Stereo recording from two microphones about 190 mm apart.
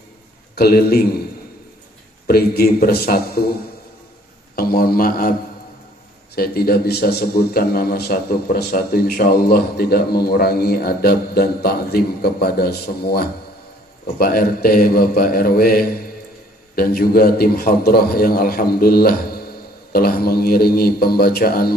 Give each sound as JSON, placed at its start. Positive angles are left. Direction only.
{"t": 0.6, "sound": "a man's voice", "side_deg": 55}
{"t": 2.2, "sound": "a man's voice", "side_deg": 55}
{"t": 4.6, "sound": "a man's voice", "side_deg": 55}
{"t": 6.3, "sound": "a man's voice", "side_deg": 55}